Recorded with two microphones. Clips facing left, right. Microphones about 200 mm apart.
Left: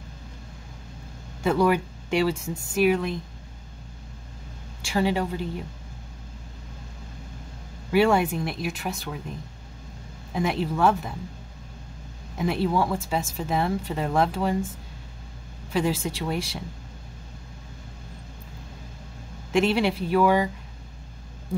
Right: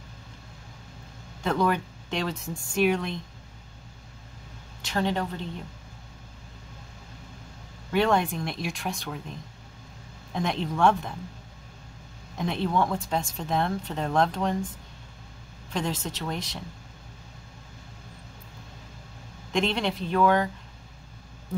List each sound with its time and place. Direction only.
1.4 s speech: 10° left (ahead or behind)
4.8 s speech: 10° left (ahead or behind)
7.9 s speech: 5° left (ahead or behind)
10.3 s speech: 5° left (ahead or behind)
12.4 s speech: 5° left (ahead or behind)
15.7 s speech: 10° left (ahead or behind)
19.5 s speech: 5° left (ahead or behind)